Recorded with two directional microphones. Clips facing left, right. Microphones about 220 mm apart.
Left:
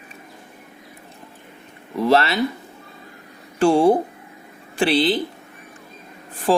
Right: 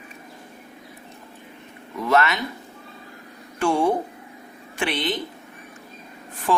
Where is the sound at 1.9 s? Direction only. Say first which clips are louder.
Left 3 dB; 30° left (ahead or behind).